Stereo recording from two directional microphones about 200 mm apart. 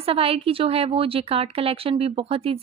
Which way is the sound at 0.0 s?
30° right (ahead or behind).